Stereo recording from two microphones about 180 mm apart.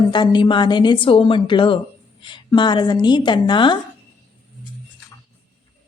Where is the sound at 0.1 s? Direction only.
25° left (ahead or behind).